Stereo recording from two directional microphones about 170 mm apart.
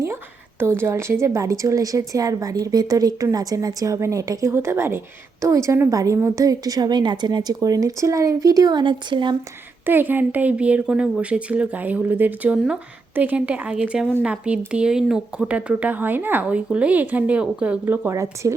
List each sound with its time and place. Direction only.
0.6 s a woman's voice: 15° right (ahead or behind)
9.8 s a woman's voice: 10° right (ahead or behind)